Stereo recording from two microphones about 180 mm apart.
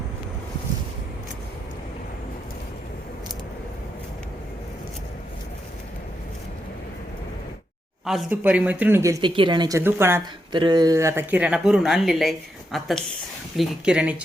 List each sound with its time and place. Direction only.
8.0 s speech: 5° right (ahead or behind)
10.5 s speech: 25° right (ahead or behind); by 14.2 s 5° right (ahead or behind)